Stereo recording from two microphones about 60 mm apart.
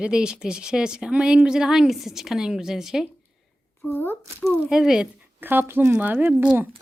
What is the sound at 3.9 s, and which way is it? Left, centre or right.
Speech, left.